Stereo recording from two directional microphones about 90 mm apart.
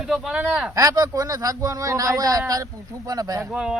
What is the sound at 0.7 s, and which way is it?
Speech, 40° right (ahead or behind).